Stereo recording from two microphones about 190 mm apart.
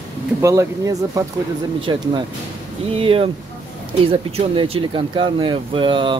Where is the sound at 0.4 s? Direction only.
15° right (ahead or behind).